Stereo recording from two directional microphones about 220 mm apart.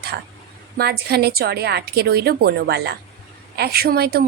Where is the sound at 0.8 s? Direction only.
45° right (ahead or behind).